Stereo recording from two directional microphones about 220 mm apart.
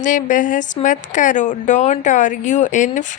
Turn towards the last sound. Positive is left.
turn(degrees=35)  # may be behind; listen again after turning